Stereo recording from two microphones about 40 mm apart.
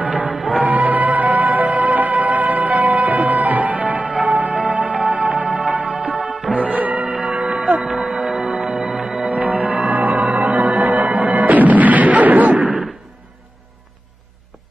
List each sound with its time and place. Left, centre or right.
0.0 s music: right
8.1 s music: centre
9.3 s music: right